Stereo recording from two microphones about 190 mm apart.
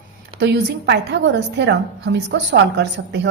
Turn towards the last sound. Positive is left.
turn(degrees=-70)  # may be behind; listen again after turning